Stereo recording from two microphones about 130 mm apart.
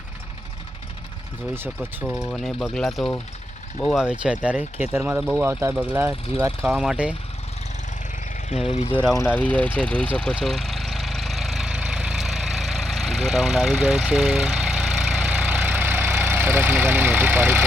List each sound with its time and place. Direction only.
1.5 s speech: 15° right (ahead or behind)
2.0 s speech: centre (ahead or behind)
8.7 s speech: 55° left (ahead or behind)
9.1 s vehicle: 15° left (ahead or behind); by 17.7 s 15° right (ahead or behind)